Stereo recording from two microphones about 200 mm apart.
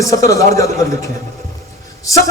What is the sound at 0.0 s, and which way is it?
A man's voice, 15° left (ahead or behind).